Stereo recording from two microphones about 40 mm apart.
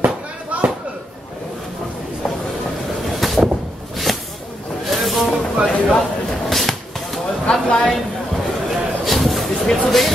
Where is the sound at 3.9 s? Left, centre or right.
Centre.